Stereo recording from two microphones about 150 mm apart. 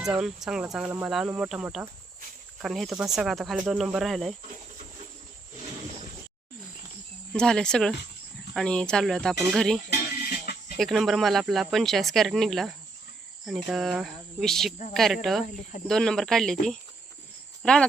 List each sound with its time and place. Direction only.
0.0 s speech: 5° right (ahead or behind)
7.3 s speech: 5° left (ahead or behind)
10.2 s music: 80° left
10.8 s speech: centre (ahead or behind)